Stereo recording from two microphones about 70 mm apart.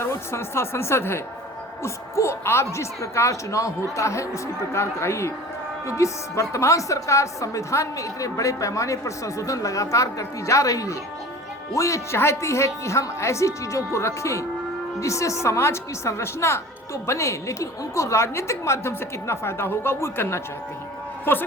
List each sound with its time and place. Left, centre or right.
0.0 s a woman's voice: left